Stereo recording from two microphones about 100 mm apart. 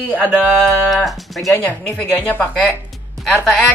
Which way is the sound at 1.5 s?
15° left (ahead or behind).